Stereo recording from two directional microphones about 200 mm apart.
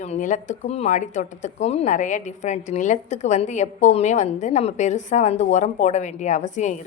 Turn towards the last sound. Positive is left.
turn(degrees=35)  # may be behind; listen again after turning